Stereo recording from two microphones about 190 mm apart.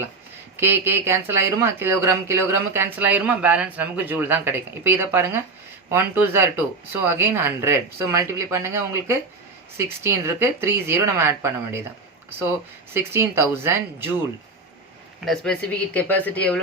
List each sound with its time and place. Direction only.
0.5 s speech: 10° right (ahead or behind)
15.2 s speech: 5° left (ahead or behind)